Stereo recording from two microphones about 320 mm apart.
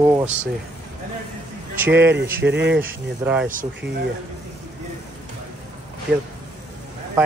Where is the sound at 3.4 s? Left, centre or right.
Right.